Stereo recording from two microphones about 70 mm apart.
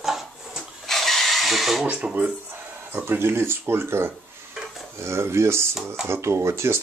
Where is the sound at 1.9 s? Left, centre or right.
Centre.